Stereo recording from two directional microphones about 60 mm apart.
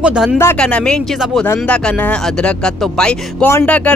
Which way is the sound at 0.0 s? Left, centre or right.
Centre.